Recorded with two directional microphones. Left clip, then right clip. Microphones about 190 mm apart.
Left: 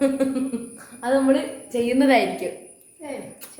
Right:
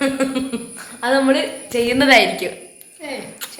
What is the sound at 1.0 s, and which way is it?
Speech, 20° right (ahead or behind).